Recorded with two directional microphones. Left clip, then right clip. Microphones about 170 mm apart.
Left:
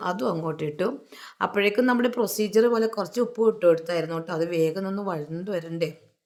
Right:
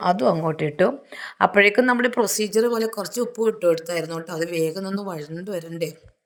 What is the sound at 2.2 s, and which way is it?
Speech, 50° right (ahead or behind).